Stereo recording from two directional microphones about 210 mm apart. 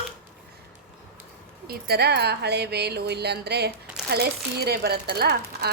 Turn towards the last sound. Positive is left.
turn(degrees=-50)  # may be behind; listen again after turning